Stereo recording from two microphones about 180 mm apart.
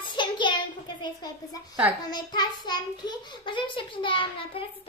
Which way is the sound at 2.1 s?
25° left (ahead or behind).